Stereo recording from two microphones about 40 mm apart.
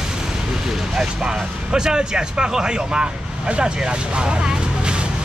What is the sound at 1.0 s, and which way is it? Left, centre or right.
Speech, centre.